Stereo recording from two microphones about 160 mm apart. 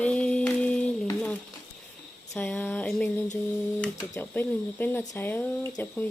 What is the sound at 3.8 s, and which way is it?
Speech, 10° left (ahead or behind).